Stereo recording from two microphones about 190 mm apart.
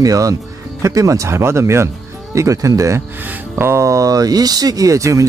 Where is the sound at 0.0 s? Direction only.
20° right (ahead or behind).